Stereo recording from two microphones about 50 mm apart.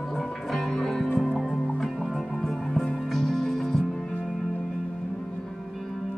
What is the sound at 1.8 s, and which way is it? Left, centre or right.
Music, centre.